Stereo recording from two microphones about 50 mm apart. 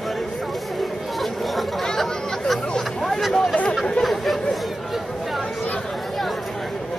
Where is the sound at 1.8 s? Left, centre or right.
Centre.